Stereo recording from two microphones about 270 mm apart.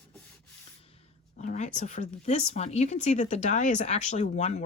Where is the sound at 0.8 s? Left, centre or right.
Left.